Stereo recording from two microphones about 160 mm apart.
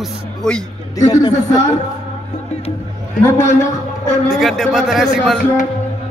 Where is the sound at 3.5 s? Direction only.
50° left (ahead or behind).